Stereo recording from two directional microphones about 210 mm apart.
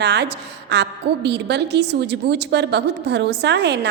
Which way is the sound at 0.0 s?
55° right (ahead or behind).